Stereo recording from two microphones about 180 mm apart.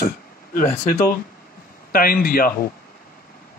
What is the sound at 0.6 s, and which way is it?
Speech, 50° left (ahead or behind).